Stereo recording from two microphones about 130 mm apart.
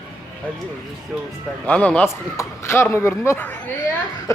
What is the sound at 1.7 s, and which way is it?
Speech, 10° left (ahead or behind).